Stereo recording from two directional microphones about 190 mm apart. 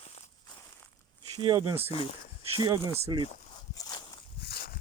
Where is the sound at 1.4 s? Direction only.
25° right (ahead or behind).